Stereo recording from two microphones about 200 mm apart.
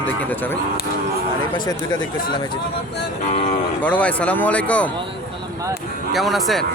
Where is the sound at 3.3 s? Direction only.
35° left (ahead or behind).